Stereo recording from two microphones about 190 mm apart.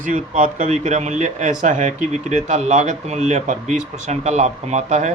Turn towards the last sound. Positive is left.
turn(degrees=-35)  # may be behind; listen again after turning